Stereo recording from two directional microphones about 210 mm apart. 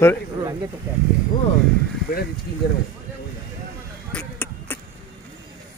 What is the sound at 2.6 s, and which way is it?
Speech, 50° left (ahead or behind).